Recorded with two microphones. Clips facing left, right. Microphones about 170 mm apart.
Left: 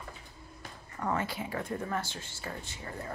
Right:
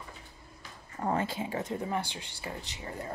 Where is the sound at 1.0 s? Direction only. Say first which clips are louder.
Right 2 dB; 25° right (ahead or behind).